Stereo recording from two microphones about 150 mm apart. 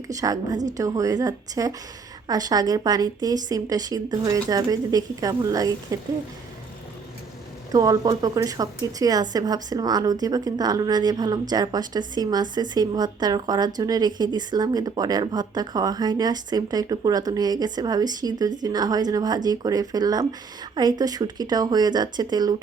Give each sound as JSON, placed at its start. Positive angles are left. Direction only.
{"t": 0.1, "sound": "a woman's voice", "side_deg": -25}
{"t": 7.7, "sound": "a woman's voice", "side_deg": -25}